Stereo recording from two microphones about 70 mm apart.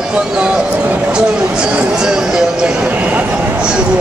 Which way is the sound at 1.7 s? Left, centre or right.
Centre.